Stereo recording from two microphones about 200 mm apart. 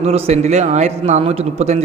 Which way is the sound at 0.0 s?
30° right (ahead or behind).